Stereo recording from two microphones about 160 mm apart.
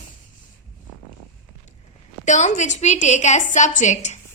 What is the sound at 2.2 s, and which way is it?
A woman's voice, 50° left (ahead or behind).